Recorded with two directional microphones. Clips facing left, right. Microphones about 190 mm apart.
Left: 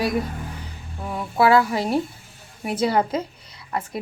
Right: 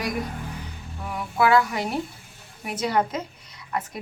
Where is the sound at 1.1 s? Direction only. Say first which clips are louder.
Left 3 dB; 30° left (ahead or behind).